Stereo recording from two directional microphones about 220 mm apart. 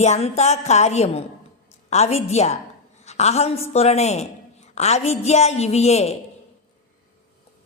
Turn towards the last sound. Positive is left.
turn(degrees=30)  # may be behind; listen again after turning